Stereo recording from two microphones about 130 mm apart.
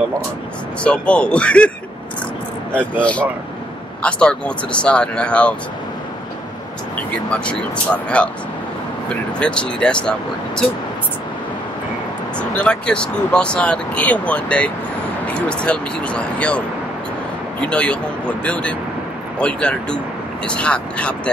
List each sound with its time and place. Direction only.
0.8 s speech: 10° left (ahead or behind)
3.0 s speech: 10° left (ahead or behind)
7.2 s speech: 10° left (ahead or behind)
12.4 s speech: 10° left (ahead or behind)